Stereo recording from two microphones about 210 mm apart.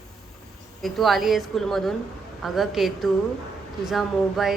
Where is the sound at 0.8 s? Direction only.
Centre (ahead or behind).